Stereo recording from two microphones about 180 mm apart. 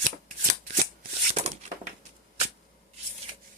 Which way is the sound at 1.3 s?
35° right (ahead or behind).